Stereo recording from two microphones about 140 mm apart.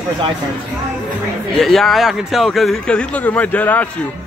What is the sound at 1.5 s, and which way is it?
Speech, centre (ahead or behind).